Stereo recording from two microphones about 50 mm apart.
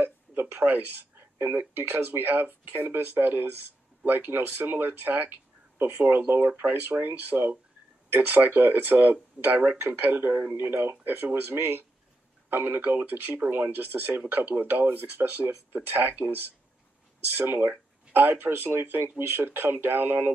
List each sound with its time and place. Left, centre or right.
0.0 s a sound: right
1.4 s speech: right
2.0 s speech: right
18.1 s speech: right